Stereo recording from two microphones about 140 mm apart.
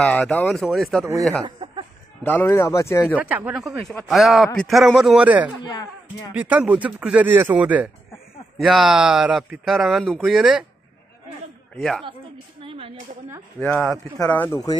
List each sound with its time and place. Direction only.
0.0 s speech: 5° left (ahead or behind)
1.4 s a sound: 40° right (ahead or behind)
2.2 s speech: 15° left (ahead or behind)
3.2 s speech: 10° right (ahead or behind)
5.6 s speech: 30° left (ahead or behind)
6.3 s speech: 10° right (ahead or behind)
11.7 s speech: 5° left (ahead or behind)
12.6 s a sound: 40° right (ahead or behind)
13.6 s speech: 5° left (ahead or behind)